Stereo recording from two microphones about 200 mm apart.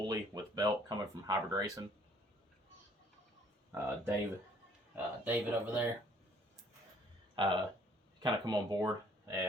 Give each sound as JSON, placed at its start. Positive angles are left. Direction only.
{"t": 0.1, "sound": "a sound", "side_deg": -20}
{"t": 3.7, "sound": "speech", "side_deg": -15}
{"t": 7.3, "sound": "speech", "side_deg": -25}